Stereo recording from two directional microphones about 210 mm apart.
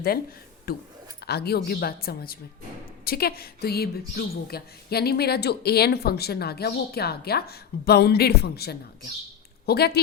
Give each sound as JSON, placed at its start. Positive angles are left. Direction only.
{"t": 0.7, "sound": "a woman's voice", "side_deg": 45}